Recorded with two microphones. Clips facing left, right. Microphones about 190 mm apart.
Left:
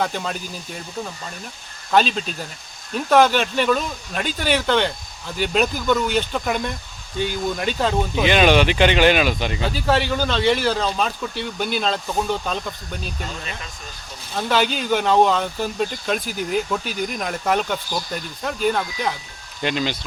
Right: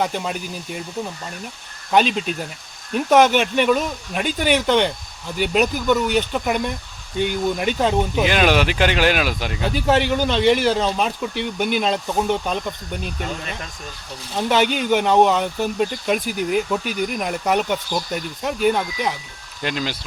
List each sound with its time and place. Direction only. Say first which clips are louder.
0.0 s speech: right 1 dB; 10° right (ahead or behind)
2.9 s speech: right 1 dB; 20° right (ahead or behind)
8.1 s speech: left 1 dB; centre (ahead or behind)
9.7 s speech: right 4 dB; 20° right (ahead or behind)
14.3 s speech: right 2 dB; 20° right (ahead or behind)
19.6 s speech: left 2 dB; 5° right (ahead or behind)